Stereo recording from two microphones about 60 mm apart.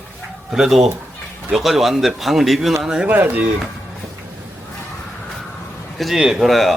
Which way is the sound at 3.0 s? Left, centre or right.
Right.